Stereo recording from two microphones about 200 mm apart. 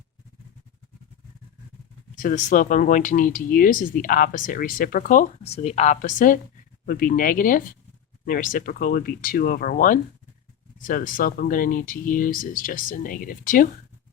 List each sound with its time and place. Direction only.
2.1 s speech: 40° left (ahead or behind)